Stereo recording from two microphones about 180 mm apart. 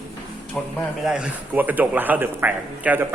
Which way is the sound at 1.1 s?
5° right (ahead or behind).